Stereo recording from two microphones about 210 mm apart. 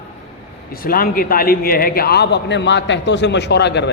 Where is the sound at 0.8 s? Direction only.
45° left (ahead or behind).